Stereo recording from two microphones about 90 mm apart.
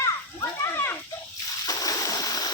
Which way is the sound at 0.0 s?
35° left (ahead or behind).